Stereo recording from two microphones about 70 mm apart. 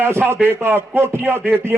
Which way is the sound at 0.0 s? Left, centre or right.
Right.